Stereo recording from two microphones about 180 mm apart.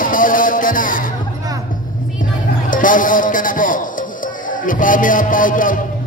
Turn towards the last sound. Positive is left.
turn(degrees=50)  # may be behind; listen again after turning